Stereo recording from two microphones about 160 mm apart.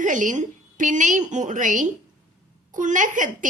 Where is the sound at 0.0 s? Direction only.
50° right (ahead or behind).